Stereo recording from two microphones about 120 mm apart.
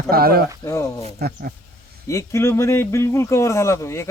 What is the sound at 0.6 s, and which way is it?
Speech, 25° left (ahead or behind).